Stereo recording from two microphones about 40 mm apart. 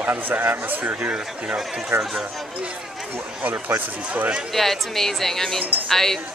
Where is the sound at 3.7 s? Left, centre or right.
Right.